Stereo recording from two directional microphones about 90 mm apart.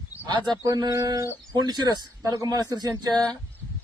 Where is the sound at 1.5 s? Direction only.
50° right (ahead or behind).